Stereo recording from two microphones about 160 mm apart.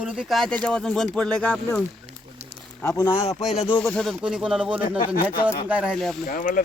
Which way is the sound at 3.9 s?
Centre (ahead or behind).